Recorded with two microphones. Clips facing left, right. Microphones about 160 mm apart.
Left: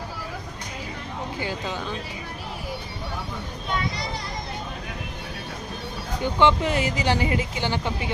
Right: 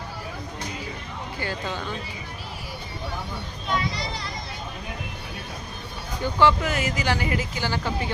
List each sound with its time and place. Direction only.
1.4 s speech: 15° left (ahead or behind)
6.4 s speech: 30° left (ahead or behind)